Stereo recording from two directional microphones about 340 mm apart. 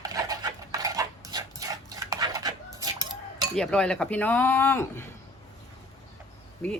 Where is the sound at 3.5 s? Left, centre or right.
Centre.